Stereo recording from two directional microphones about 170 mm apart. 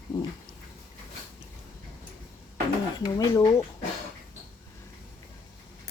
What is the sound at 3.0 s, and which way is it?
Speech, 20° left (ahead or behind).